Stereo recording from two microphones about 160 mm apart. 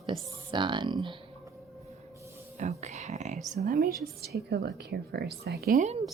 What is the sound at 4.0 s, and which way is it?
Speech, 85° right.